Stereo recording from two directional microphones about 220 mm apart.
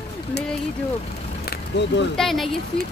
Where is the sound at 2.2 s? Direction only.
Centre (ahead or behind).